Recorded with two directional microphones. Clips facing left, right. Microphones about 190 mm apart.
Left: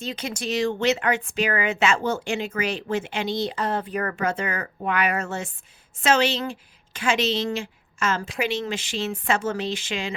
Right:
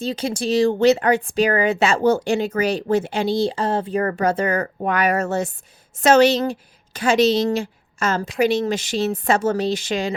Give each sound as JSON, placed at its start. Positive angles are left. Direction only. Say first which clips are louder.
{"t": 0.0, "sound": "speech", "louder": "right 7 dB", "side_deg": -30}